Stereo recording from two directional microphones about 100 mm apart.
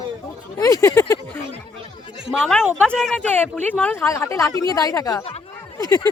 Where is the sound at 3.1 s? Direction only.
15° left (ahead or behind).